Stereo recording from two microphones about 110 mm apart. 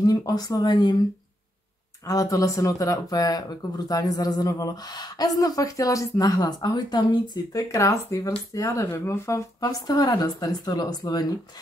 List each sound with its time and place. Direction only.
0.0 s speech: 35° left (ahead or behind)
2.0 s speech: 30° left (ahead or behind)